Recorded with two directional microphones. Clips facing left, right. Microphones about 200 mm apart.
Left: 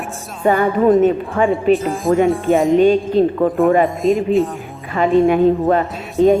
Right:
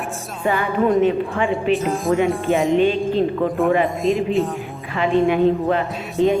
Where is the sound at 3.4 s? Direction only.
40° left (ahead or behind).